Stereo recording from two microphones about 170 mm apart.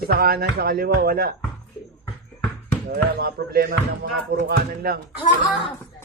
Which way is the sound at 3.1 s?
60° right (ahead or behind).